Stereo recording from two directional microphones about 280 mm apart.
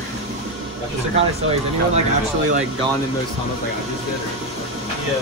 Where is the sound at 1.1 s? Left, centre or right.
Right.